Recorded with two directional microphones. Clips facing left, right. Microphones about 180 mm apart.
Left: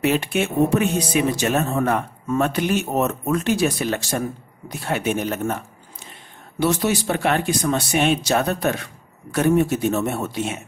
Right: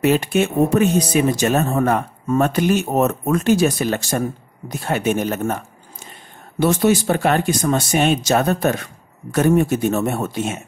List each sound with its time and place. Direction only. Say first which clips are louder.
0.0 s speech: right 4 dB; 40° right (ahead or behind)
6.6 s speech: right 4 dB; 50° right (ahead or behind)